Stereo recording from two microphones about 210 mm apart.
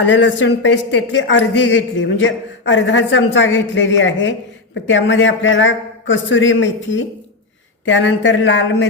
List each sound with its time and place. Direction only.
0.0 s a woman's voice: 60° left (ahead or behind)